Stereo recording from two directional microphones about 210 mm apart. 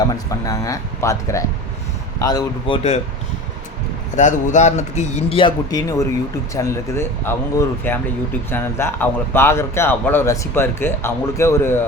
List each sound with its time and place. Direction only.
0.3 s speech: 15° left (ahead or behind)
4.1 s a man's voice: 35° left (ahead or behind); by 11.8 s 10° left (ahead or behind)